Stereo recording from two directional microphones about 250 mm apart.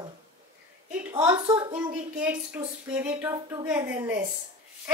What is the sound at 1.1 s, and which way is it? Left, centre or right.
Speech, centre.